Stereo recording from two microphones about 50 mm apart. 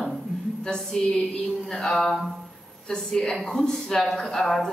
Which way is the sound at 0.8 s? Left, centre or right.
Centre.